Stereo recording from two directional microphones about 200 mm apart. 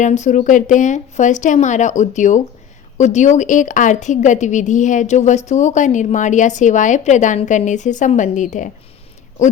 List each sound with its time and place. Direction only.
0.0 s a woman's voice: 35° left (ahead or behind)